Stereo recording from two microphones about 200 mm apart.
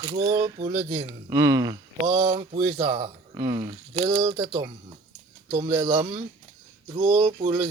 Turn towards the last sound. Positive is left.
turn(degrees=-25)  # may be behind; listen again after turning